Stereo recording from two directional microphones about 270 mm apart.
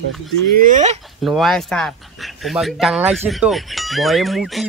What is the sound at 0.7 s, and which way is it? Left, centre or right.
Speech, right.